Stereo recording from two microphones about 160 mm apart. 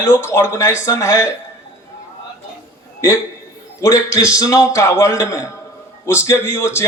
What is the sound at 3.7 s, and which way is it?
A man's voice, 20° left (ahead or behind).